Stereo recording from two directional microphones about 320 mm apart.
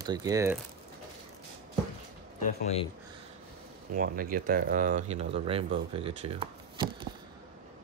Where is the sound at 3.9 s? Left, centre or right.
Right.